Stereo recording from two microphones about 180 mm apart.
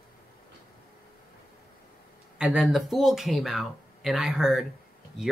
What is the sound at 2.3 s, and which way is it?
Speech, 5° right (ahead or behind).